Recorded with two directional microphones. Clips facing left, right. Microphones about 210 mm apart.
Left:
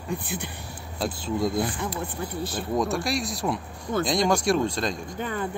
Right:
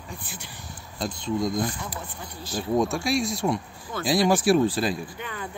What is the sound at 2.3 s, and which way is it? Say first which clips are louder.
Speech: right 1 dB; 60° left (ahead or behind).